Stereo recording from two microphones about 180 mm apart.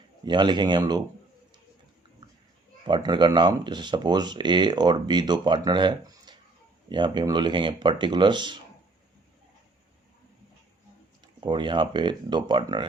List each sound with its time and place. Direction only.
0.3 s speech: 25° right (ahead or behind)
2.8 s speech: 25° right (ahead or behind)
11.3 s speech: 25° right (ahead or behind)